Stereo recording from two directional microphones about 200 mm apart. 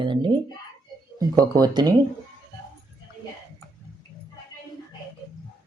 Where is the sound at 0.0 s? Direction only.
25° right (ahead or behind).